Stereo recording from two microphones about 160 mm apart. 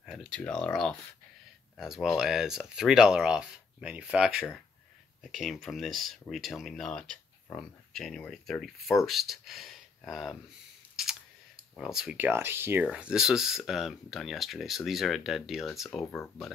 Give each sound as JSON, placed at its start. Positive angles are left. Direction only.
{"t": 0.0, "sound": "speech", "side_deg": 0}
{"t": 11.7, "sound": "speech", "side_deg": 0}
{"t": 12.3, "sound": "speech", "side_deg": -15}